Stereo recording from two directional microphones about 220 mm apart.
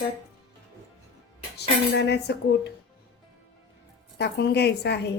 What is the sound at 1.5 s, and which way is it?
Speech, 50° left (ahead or behind).